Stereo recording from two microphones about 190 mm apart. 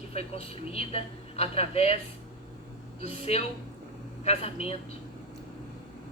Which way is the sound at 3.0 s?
35° left (ahead or behind).